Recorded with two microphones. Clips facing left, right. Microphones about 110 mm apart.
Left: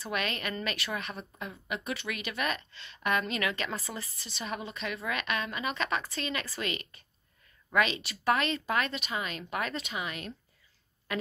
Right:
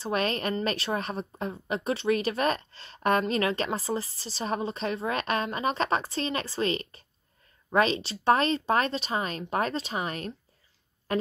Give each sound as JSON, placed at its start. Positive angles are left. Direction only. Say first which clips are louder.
{"t": 0.0, "sound": "speech", "louder": "right 6 dB", "side_deg": -35}